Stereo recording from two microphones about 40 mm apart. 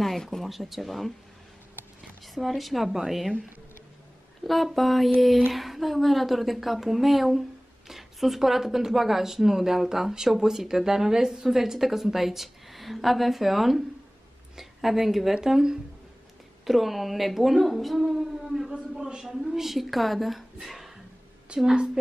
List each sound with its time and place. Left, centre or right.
0.0 s a sound: centre
0.4 s a woman's voice: centre
2.2 s a woman's voice: centre
4.5 s a woman's voice: centre
15.3 s a woman's voice: centre
20.6 s a sound: centre
21.5 s a woman's voice: right